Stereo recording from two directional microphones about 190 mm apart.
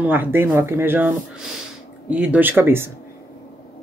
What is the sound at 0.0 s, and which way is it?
Speech, 10° right (ahead or behind).